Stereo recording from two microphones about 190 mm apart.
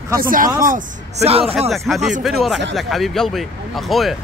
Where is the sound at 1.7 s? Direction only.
Centre (ahead or behind).